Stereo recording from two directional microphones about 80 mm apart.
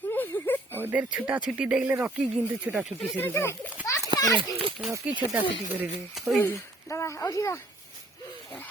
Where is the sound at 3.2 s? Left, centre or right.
Left.